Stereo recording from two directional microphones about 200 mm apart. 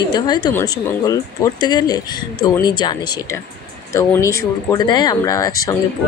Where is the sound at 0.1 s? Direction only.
20° left (ahead or behind).